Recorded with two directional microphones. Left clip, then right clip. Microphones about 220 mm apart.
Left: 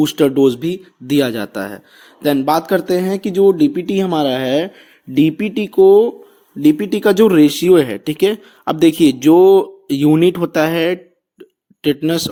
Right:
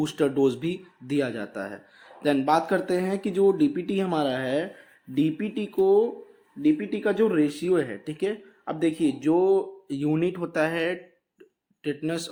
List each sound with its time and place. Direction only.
0.0 s speech: 35° left (ahead or behind)
6.6 s speech: 50° left (ahead or behind); by 12.3 s 35° left (ahead or behind)